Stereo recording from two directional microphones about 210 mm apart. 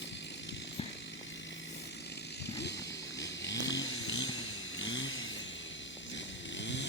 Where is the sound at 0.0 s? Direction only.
55° left (ahead or behind).